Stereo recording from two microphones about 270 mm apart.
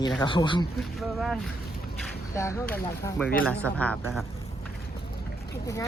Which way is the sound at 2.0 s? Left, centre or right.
Centre.